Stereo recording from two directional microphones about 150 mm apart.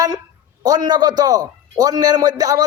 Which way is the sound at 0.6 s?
25° right (ahead or behind).